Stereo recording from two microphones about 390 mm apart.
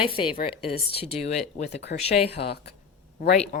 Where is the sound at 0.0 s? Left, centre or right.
Centre.